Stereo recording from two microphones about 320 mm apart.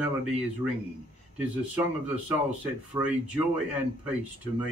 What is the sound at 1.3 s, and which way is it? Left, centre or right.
Speech, centre.